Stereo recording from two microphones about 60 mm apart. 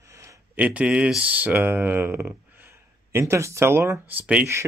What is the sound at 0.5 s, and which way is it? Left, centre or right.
Speech, right.